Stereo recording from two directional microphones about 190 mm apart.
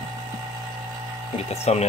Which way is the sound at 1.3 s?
35° left (ahead or behind).